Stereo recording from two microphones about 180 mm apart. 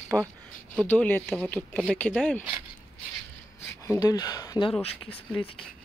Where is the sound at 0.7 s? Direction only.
5° left (ahead or behind).